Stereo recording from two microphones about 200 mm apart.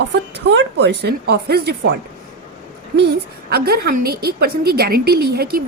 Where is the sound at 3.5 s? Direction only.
50° right (ahead or behind).